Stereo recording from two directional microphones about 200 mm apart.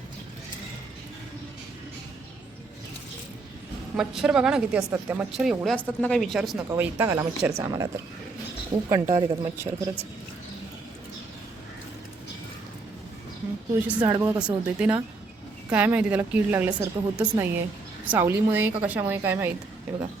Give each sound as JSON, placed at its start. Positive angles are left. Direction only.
{"t": 3.9, "sound": "a woman's voice", "side_deg": -5}
{"t": 5.4, "sound": "a woman's voice", "side_deg": 0}
{"t": 6.7, "sound": "a woman's voice", "side_deg": -10}
{"t": 8.9, "sound": "a woman's voice", "side_deg": -20}
{"t": 13.8, "sound": "a woman's voice", "side_deg": -5}
{"t": 14.4, "sound": "a woman's voice", "side_deg": -5}